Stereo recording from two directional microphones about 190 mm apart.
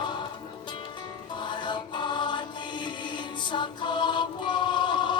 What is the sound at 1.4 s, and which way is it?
Music, 25° left (ahead or behind).